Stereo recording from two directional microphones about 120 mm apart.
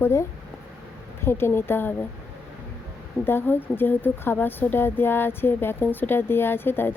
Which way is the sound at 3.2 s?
20° left (ahead or behind).